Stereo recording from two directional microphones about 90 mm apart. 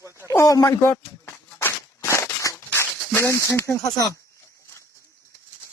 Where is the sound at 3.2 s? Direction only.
25° left (ahead or behind).